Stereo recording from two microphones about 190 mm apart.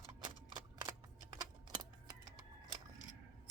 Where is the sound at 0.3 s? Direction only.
25° right (ahead or behind).